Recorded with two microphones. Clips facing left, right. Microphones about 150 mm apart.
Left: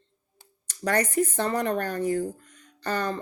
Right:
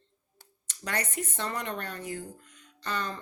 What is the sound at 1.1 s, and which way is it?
Speech, 35° left (ahead or behind).